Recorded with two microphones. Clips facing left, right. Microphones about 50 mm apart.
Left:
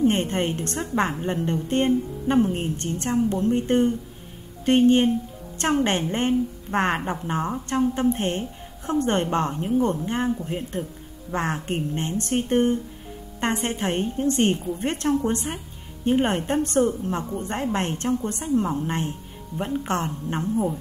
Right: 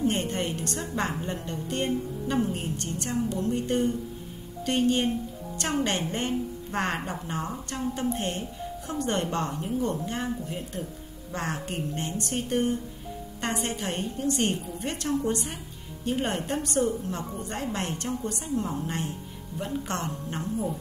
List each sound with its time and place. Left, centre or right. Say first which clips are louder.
0.0 s speech: left 5 dB; left